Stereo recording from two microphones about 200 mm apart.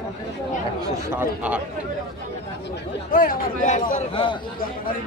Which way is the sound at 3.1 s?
40° left (ahead or behind).